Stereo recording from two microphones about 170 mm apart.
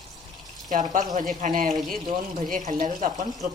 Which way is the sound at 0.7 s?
45° right (ahead or behind).